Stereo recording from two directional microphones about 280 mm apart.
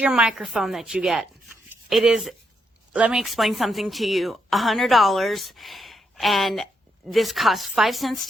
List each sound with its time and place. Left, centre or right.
0.0 s a woman's voice: centre